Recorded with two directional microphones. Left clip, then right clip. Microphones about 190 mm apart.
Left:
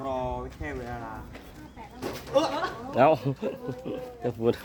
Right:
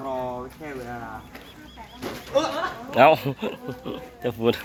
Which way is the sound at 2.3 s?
55° left (ahead or behind).